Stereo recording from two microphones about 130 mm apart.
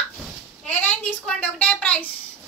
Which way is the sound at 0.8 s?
10° left (ahead or behind).